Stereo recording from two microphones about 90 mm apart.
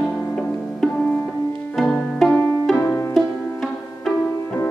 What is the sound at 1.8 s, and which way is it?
Music, 5° left (ahead or behind).